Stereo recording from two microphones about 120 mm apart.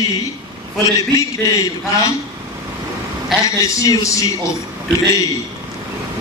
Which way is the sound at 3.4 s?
30° left (ahead or behind).